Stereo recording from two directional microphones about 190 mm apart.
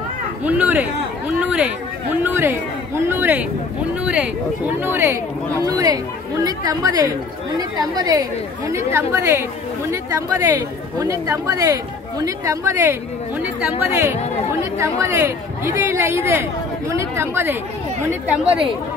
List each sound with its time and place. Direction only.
0.4 s a woman's voice: 10° right (ahead or behind)